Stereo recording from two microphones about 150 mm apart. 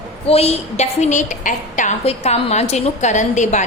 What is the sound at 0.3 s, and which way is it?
A woman's voice, 45° left (ahead or behind).